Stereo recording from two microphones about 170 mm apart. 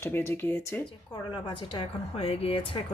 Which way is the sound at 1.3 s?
25° left (ahead or behind).